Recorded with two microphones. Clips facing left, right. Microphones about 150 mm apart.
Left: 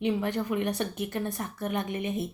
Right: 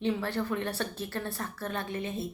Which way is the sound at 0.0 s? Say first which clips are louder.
Left 2 dB; 15° left (ahead or behind).